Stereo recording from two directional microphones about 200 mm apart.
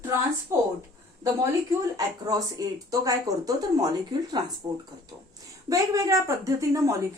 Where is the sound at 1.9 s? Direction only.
20° right (ahead or behind).